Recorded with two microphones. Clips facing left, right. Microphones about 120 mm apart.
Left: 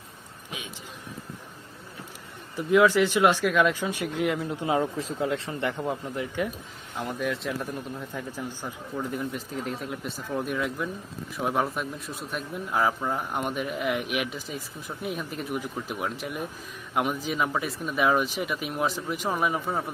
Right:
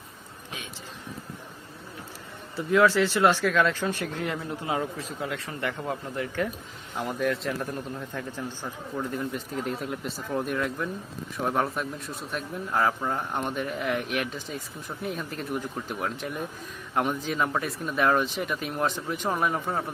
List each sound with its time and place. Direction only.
2.6 s speech: 15° left (ahead or behind)
4.6 s speech: 25° left (ahead or behind)
6.9 s a man's voice: 5° right (ahead or behind); by 8.7 s 10° left (ahead or behind)
9.0 s a man's voice: centre (ahead or behind)